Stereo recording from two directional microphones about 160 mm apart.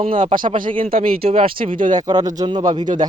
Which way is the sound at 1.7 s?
55° right (ahead or behind).